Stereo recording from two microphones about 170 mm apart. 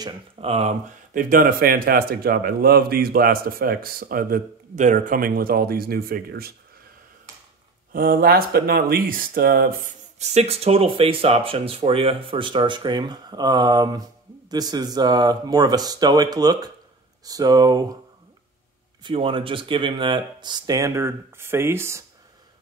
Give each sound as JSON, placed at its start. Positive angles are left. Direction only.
{"t": 0.0, "sound": "speech", "side_deg": -35}
{"t": 7.9, "sound": "speech", "side_deg": -60}
{"t": 10.1, "sound": "speech", "side_deg": -40}
{"t": 19.0, "sound": "speech", "side_deg": -30}